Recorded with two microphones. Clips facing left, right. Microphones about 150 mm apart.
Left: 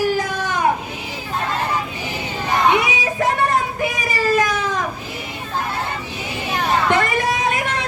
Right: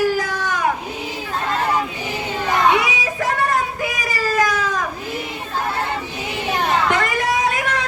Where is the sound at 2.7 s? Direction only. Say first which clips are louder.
Left 1 dB; 25° left (ahead or behind).